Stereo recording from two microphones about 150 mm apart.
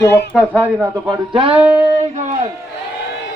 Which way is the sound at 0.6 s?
20° right (ahead or behind).